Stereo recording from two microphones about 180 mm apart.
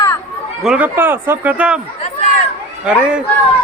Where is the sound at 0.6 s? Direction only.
5° right (ahead or behind).